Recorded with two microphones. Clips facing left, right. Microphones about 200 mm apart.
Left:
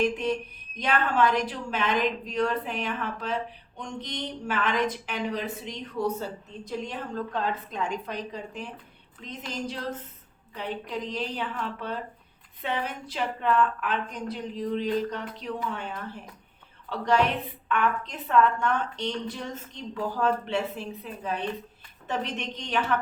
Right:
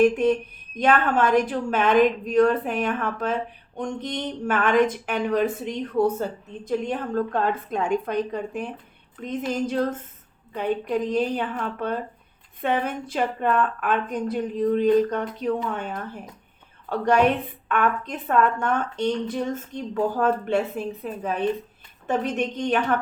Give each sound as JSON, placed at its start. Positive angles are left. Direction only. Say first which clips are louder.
{"t": 0.0, "sound": "a woman's voice", "louder": "right 8 dB", "side_deg": -50}